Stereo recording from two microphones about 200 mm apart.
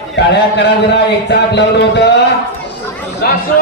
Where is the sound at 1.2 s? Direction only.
60° left (ahead or behind).